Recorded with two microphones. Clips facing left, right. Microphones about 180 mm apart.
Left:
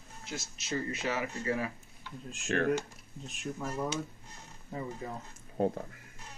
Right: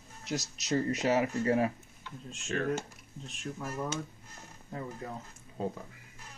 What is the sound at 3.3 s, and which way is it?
Speech, 5° left (ahead or behind).